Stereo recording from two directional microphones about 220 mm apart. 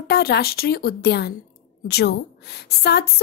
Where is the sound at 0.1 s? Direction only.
45° left (ahead or behind).